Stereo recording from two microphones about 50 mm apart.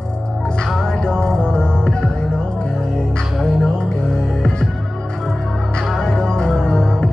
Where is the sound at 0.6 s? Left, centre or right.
Centre.